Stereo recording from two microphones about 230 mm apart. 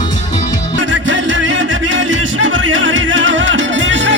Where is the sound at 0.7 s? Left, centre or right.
Right.